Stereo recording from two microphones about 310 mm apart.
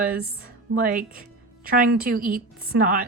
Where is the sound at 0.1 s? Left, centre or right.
Right.